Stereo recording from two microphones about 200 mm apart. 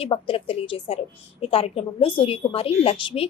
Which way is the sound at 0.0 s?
25° left (ahead or behind).